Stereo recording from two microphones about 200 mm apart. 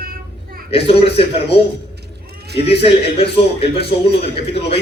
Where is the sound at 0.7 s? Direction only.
30° left (ahead or behind).